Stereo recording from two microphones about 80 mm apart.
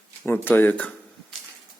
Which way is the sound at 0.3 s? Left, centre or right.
Left.